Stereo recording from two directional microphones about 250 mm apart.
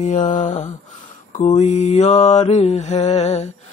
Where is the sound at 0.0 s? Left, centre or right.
Left.